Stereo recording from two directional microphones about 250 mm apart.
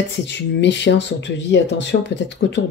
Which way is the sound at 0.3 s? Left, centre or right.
Left.